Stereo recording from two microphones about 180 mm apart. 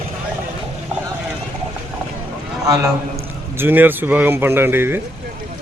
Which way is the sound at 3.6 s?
10° right (ahead or behind).